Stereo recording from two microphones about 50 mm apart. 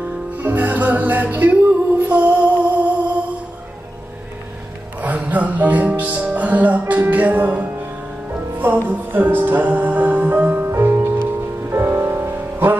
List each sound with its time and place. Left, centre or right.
0.4 s music: right
5.0 s music: right
10.7 s music: right